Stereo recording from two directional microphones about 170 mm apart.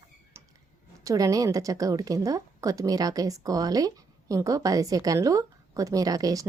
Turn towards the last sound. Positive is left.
turn(degrees=-20)  # may be behind; listen again after turning